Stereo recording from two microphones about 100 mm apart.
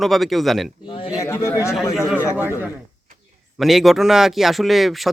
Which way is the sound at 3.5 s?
Centre (ahead or behind).